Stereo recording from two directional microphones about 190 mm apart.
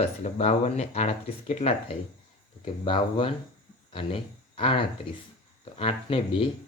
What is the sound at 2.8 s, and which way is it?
Speech, 25° left (ahead or behind).